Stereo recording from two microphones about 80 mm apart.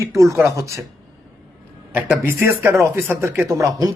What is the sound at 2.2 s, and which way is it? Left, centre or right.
A man's voice, right.